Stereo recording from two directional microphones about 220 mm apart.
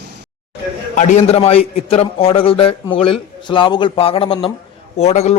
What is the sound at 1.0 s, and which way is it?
Speech, 30° left (ahead or behind).